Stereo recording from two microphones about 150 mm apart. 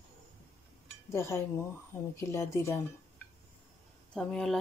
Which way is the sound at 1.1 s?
20° left (ahead or behind).